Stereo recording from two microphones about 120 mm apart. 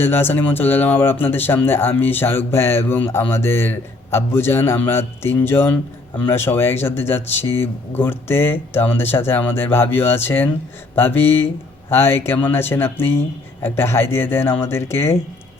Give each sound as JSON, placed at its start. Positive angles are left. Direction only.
{"t": 0.0, "sound": "speech", "side_deg": 20}